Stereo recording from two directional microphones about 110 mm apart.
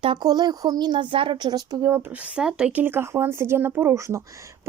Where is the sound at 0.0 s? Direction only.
50° right (ahead or behind).